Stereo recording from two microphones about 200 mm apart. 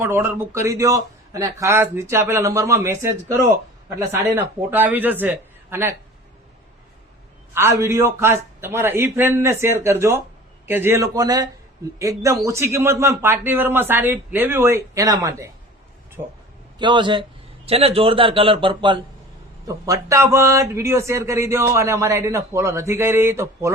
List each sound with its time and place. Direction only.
0.0 s speech: 10° right (ahead or behind)
7.5 s speech: 10° right (ahead or behind)
16.7 s a man's voice: 25° right (ahead or behind)